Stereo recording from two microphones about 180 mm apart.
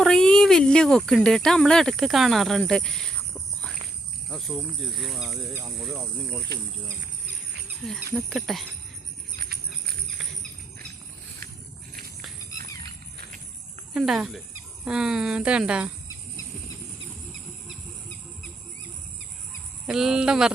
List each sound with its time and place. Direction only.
0.0 s speech: 5° left (ahead or behind)
7.9 s speech: centre (ahead or behind)
9.3 s a sound: 60° right (ahead or behind)
13.9 s speech: 5° right (ahead or behind)
19.9 s speech: 5° right (ahead or behind)